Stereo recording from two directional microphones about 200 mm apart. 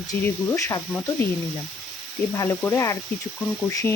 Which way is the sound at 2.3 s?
15° left (ahead or behind).